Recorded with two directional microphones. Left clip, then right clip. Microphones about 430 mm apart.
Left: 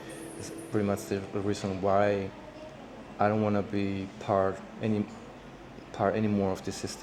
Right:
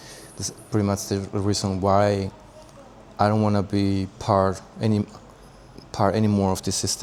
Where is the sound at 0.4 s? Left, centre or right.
Right.